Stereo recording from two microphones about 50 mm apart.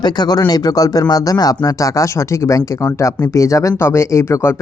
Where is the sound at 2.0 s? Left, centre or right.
Left.